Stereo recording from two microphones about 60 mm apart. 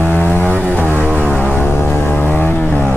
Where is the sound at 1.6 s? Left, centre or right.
Left.